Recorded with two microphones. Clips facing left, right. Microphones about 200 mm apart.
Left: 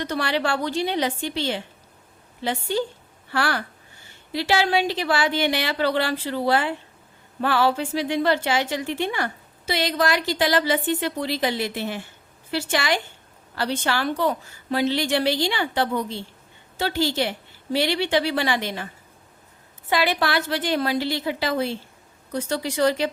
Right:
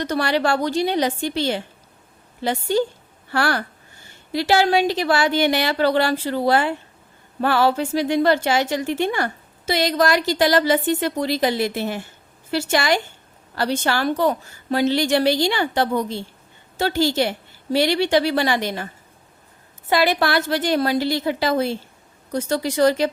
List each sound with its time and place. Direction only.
0.0 s a woman's voice: 45° right (ahead or behind)
19.9 s a woman's voice: 40° right (ahead or behind)